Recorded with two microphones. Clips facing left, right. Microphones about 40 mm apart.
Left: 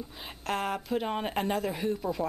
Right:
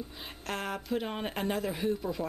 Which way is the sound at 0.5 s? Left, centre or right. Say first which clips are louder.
Left 3 dB; centre.